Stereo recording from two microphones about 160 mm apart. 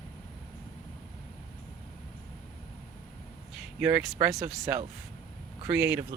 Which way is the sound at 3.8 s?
10° right (ahead or behind).